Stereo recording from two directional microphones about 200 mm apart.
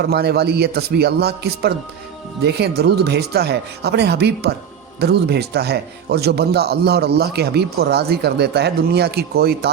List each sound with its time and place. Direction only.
0.0 s speech: 50° right (ahead or behind)